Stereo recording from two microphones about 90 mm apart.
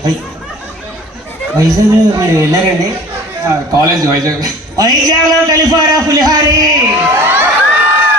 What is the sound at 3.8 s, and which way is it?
A man's voice, 40° right (ahead or behind).